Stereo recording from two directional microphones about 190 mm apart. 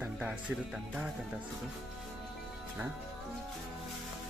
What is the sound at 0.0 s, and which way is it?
Music, 5° right (ahead or behind).